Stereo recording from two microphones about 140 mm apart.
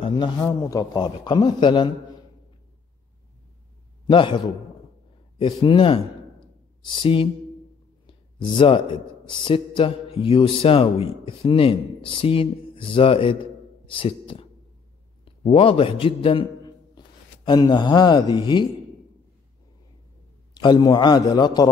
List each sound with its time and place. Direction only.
0.4 s speech: 25° left (ahead or behind)
4.1 s speech: 35° left (ahead or behind)
5.4 s speech: 35° left (ahead or behind)
8.1 s a sound: 35° left (ahead or behind)
9.3 s a man's voice: 35° left (ahead or behind)
20.6 s speech: 30° left (ahead or behind)